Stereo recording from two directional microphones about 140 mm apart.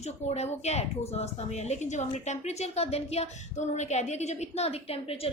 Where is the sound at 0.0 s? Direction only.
50° left (ahead or behind).